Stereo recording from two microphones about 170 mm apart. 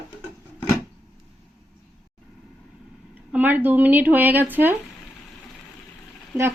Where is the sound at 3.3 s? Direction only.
10° right (ahead or behind).